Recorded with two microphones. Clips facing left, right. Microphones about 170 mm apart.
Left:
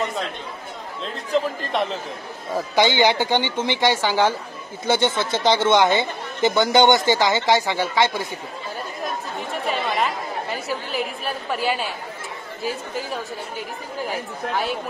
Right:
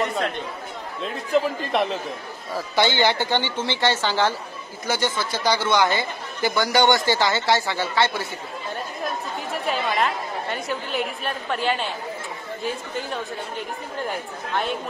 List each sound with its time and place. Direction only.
1.0 s a man's voice: centre (ahead or behind)
2.5 s a woman's voice: 15° left (ahead or behind)
4.8 s speech: 25° left (ahead or behind)
9.7 s a woman's voice: centre (ahead or behind)